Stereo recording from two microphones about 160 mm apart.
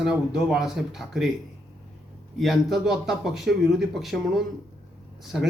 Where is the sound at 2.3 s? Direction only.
Centre (ahead or behind).